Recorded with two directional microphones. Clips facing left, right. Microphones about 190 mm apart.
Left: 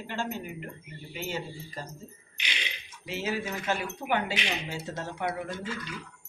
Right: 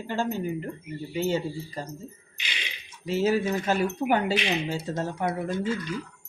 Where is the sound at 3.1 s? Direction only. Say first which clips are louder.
Right 8 dB; 40° right (ahead or behind).